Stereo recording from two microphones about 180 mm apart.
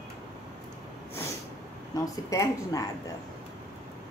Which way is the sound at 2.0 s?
20° left (ahead or behind).